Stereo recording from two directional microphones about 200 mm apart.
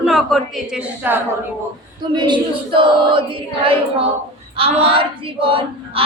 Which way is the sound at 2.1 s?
20° right (ahead or behind).